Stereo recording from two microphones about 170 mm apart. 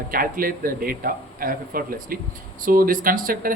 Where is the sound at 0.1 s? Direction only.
55° right (ahead or behind).